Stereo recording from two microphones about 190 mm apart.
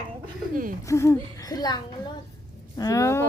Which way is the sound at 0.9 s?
15° left (ahead or behind).